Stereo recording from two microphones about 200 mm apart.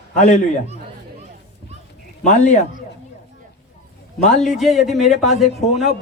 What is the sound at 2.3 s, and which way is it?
Speech, 35° left (ahead or behind).